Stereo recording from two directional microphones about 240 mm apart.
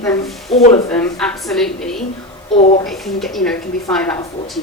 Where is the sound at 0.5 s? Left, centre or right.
Left.